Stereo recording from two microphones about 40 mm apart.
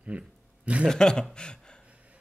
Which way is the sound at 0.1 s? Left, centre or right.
Right.